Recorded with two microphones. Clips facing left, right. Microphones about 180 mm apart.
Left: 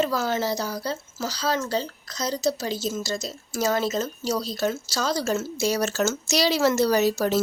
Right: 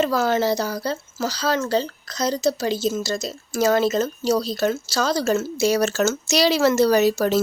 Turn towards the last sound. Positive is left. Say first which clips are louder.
# right 4 dB
turn(degrees=-75)  # may be behind; listen again after turning